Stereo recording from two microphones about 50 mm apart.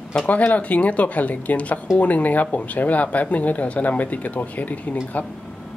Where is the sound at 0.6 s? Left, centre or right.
Left.